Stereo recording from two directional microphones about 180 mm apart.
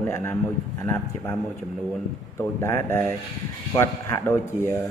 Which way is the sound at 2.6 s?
15° left (ahead or behind).